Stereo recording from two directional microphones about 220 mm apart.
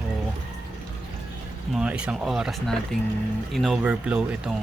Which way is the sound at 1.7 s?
5° right (ahead or behind).